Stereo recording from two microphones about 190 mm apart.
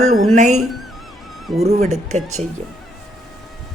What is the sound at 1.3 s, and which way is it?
Honk, centre (ahead or behind).